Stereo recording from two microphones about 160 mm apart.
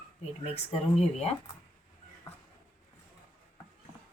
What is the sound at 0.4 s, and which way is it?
Speech, 40° left (ahead or behind).